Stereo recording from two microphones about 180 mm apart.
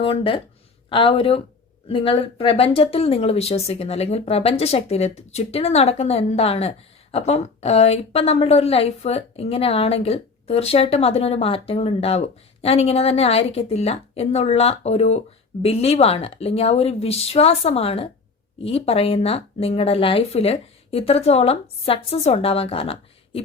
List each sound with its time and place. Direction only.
0.0 s speech: 30° left (ahead or behind)